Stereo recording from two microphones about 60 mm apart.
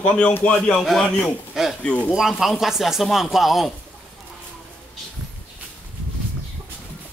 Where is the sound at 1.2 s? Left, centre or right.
Centre.